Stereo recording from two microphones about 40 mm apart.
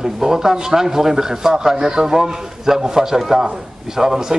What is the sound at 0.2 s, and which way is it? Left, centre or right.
A man's voice, centre.